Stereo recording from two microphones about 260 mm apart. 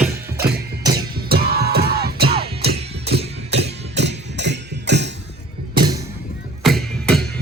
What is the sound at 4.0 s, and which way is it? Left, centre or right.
Music, right.